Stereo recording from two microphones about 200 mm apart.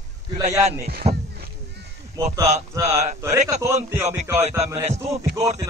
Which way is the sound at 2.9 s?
35° right (ahead or behind).